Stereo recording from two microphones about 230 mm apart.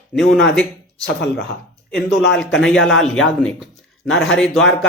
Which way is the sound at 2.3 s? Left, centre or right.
Centre.